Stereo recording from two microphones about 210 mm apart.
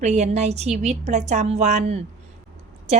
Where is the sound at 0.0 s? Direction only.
35° right (ahead or behind).